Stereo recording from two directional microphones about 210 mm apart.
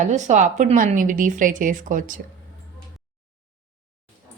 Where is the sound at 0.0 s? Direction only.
35° right (ahead or behind).